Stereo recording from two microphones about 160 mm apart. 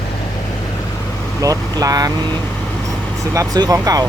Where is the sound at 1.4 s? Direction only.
20° right (ahead or behind).